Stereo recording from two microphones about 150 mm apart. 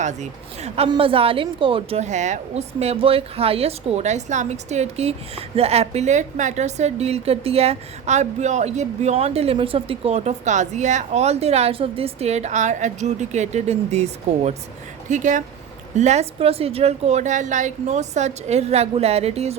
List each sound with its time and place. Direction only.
0.0 s a woman's voice: 50° right (ahead or behind)
0.9 s a woman's voice: 35° right (ahead or behind)